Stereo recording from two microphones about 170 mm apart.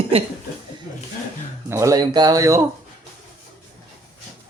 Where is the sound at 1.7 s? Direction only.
20° right (ahead or behind).